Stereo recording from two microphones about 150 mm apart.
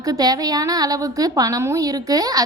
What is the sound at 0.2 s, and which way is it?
A woman's voice, 25° right (ahead or behind).